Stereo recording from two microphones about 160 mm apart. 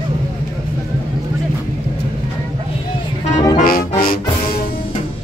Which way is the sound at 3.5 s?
65° left (ahead or behind).